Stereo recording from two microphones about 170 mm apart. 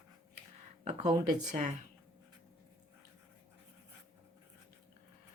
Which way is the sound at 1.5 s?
40° right (ahead or behind).